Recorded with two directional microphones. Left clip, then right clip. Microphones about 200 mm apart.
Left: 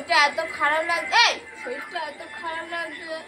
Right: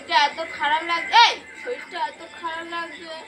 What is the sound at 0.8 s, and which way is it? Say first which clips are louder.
Speech: right 6 dB; 15° right (ahead or behind).